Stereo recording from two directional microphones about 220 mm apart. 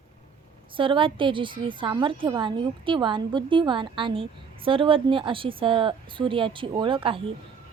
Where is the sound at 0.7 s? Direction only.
25° right (ahead or behind).